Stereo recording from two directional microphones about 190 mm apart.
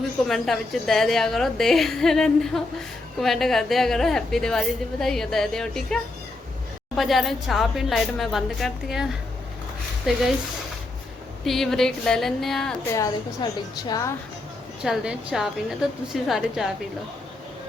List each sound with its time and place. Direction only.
0.3 s a woman's voice: centre (ahead or behind)
10.1 s a woman's voice: centre (ahead or behind)
11.4 s a woman's voice: centre (ahead or behind)
12.9 s a woman's voice: 20° left (ahead or behind)
14.8 s a woman's voice: 5° right (ahead or behind)